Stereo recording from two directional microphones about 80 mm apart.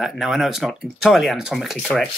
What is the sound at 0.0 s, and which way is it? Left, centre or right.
Speech, centre.